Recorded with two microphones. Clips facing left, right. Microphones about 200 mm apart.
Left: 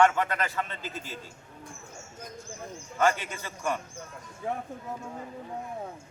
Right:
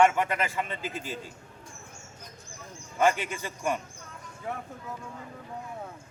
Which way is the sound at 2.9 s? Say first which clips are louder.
Right 1 dB; 15° right (ahead or behind).